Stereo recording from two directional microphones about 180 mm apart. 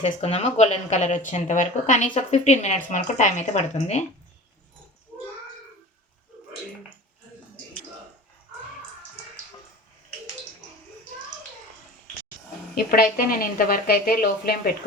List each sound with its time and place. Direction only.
0.0 s speech: 35° left (ahead or behind)
12.7 s a woman's voice: 55° left (ahead or behind)